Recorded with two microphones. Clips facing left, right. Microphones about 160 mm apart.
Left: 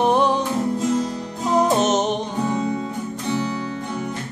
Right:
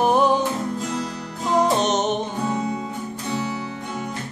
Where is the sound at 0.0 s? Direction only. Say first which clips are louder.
Even; 5° right (ahead or behind).